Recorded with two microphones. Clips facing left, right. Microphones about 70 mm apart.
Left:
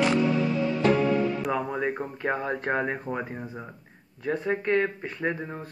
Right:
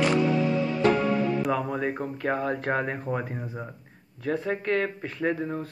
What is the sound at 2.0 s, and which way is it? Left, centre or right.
Speech, centre.